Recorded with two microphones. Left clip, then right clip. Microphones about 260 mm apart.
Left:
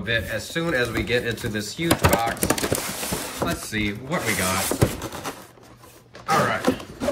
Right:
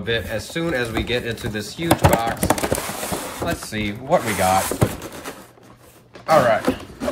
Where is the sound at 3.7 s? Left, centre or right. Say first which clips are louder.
Right 6 dB; centre.